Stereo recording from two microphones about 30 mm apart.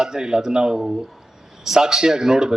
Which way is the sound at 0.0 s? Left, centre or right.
Right.